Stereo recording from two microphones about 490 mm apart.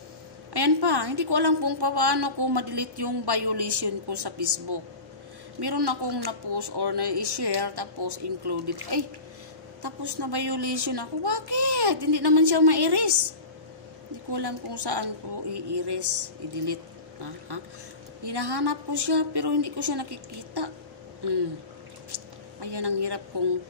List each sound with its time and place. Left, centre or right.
0.5 s a woman's voice: right
14.3 s a woman's voice: right
18.2 s a woman's voice: right
21.2 s a sound: right
22.1 s speech: right